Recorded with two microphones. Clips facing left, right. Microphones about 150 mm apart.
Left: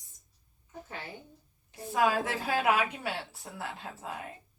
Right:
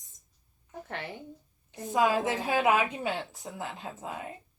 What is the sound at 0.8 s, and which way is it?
Speech, 65° right (ahead or behind).